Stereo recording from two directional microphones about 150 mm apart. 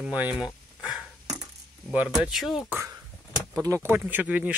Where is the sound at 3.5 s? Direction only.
20° right (ahead or behind).